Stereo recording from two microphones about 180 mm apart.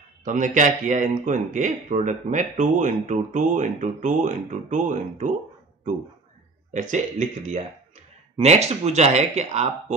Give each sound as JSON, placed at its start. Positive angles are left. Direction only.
{"t": 0.2, "sound": "a man's voice", "side_deg": -45}
{"t": 6.7, "sound": "speech", "side_deg": -45}